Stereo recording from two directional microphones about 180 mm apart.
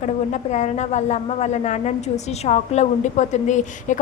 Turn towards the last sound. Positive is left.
turn(degrees=40)  # may be behind; listen again after turning